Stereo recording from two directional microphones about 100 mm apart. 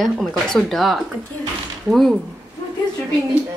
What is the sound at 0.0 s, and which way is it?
A woman's voice, centre (ahead or behind).